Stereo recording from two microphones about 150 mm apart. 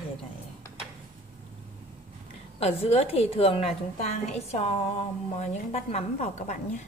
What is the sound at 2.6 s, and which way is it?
A woman's voice, 40° left (ahead or behind).